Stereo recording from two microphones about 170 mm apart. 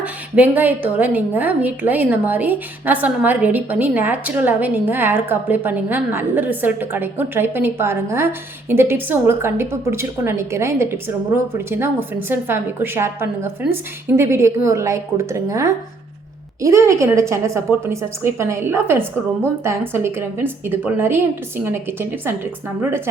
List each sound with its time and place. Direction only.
0.0 s a woman's voice: 10° right (ahead or behind)